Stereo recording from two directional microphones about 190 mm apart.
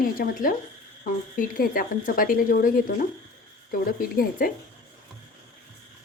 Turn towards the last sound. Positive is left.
turn(degrees=50)  # may be behind; listen again after turning